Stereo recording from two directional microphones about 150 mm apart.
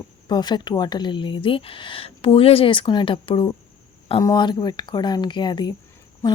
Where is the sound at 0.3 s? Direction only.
30° left (ahead or behind).